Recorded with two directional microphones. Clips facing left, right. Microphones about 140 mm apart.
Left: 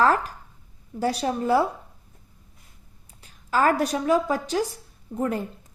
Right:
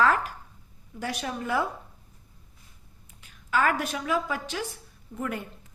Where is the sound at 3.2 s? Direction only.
35° left (ahead or behind).